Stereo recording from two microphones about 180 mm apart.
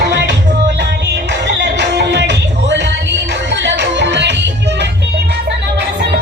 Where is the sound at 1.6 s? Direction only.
70° right (ahead or behind).